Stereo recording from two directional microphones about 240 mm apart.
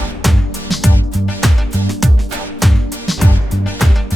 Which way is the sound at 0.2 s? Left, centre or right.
Centre.